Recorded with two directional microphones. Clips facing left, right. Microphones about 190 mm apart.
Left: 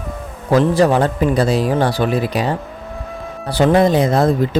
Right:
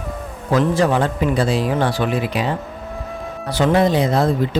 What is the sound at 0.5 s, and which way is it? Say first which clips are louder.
A man's voice: left 3 dB; 35° left (ahead or behind).